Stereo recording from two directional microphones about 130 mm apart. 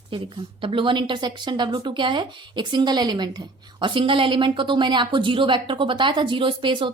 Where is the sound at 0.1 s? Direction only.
45° right (ahead or behind).